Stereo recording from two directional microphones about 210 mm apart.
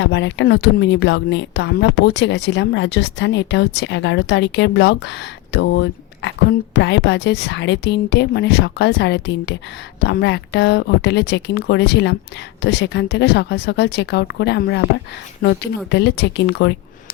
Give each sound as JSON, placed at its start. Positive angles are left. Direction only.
{"t": 0.0, "sound": "speech", "side_deg": 60}